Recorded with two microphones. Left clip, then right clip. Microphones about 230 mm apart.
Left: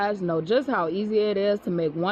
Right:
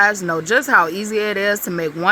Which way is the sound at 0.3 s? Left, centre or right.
Centre.